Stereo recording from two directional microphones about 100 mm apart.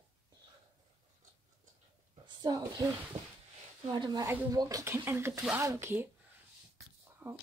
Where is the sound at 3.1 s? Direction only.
90° right.